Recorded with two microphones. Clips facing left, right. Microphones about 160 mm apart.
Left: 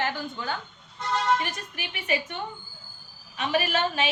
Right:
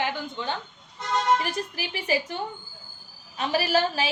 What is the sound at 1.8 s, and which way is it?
A woman's voice, 30° right (ahead or behind).